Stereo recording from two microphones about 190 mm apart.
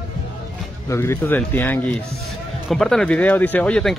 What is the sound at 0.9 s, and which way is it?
A man's voice, 15° left (ahead or behind).